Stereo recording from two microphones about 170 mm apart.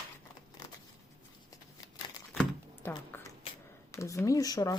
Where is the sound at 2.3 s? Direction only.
5° left (ahead or behind).